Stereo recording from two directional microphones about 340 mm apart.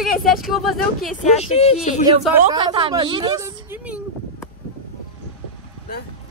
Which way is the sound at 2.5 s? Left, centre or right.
Centre.